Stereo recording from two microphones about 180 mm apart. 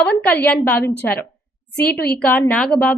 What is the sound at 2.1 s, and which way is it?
Speech, 10° left (ahead or behind).